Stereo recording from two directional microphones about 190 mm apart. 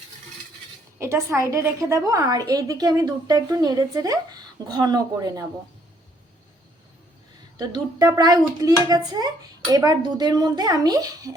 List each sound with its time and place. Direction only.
0.9 s a woman's voice: 15° right (ahead or behind)
7.5 s a woman's voice: 20° right (ahead or behind)